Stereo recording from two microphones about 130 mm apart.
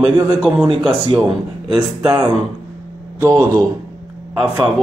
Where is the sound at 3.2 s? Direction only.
25° right (ahead or behind).